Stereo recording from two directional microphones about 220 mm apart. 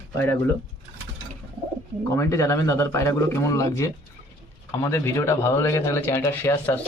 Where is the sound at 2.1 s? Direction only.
15° left (ahead or behind).